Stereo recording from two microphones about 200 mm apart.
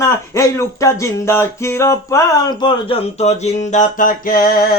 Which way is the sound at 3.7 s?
40° left (ahead or behind).